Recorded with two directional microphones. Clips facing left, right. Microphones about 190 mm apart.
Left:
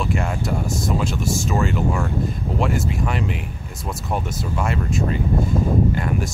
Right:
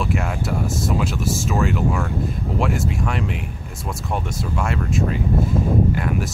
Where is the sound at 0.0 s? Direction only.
Centre (ahead or behind).